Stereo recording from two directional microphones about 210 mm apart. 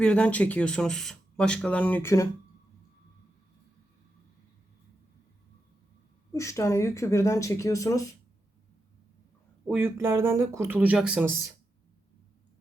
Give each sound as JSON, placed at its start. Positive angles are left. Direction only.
{"t": 0.0, "sound": "speech", "side_deg": 5}
{"t": 6.3, "sound": "speech", "side_deg": 15}
{"t": 9.6, "sound": "speech", "side_deg": -10}